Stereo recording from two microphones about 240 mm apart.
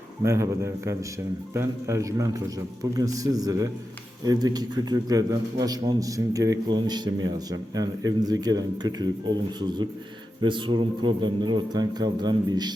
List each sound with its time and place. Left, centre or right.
0.2 s a man's voice: centre